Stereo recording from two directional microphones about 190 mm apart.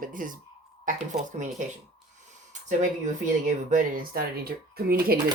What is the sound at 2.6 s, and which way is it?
Speech, 40° right (ahead or behind).